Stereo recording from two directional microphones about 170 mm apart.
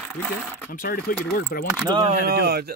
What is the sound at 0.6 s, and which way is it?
Speech, 55° left (ahead or behind).